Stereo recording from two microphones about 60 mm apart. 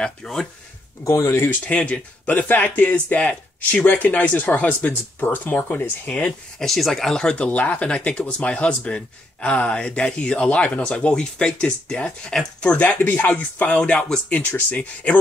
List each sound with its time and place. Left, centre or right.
0.0 s speech: centre
1.0 s speech: left
1.7 s speech: left
6.6 s speech: centre
7.2 s speech: centre